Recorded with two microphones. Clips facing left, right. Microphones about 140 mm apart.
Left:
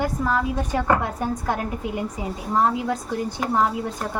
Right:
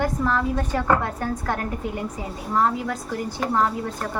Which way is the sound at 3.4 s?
15° left (ahead or behind).